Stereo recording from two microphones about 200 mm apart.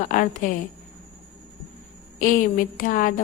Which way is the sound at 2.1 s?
40° left (ahead or behind).